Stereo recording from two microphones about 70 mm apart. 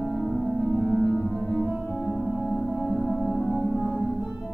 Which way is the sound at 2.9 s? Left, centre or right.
Centre.